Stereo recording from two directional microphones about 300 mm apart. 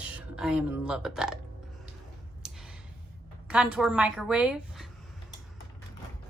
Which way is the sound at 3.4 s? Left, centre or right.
Centre.